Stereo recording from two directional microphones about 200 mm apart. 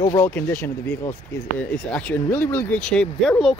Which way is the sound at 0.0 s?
15° left (ahead or behind).